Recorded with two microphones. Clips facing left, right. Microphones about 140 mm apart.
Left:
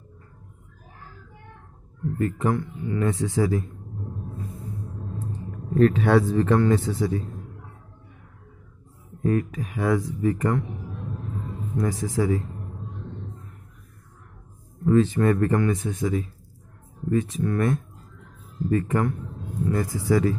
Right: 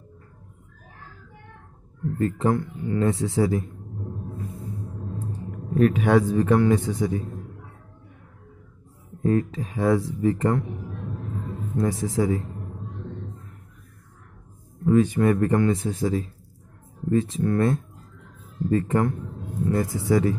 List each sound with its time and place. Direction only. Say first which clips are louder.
2.1 s speech: right 2 dB; 30° right (ahead or behind)
5.8 s a man's voice: even; 15° right (ahead or behind)
9.2 s speech: right 1 dB; 30° right (ahead or behind)
11.7 s speech: right 2 dB; 25° right (ahead or behind)
14.9 s speech: even; 15° right (ahead or behind)